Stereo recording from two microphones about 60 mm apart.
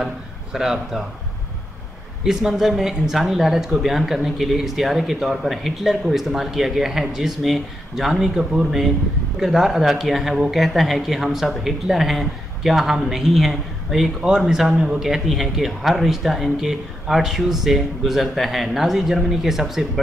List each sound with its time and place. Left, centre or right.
0.0 s speech: centre
2.2 s speech: centre